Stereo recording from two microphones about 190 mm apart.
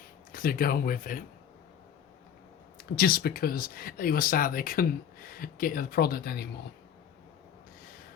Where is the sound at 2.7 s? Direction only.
50° left (ahead or behind).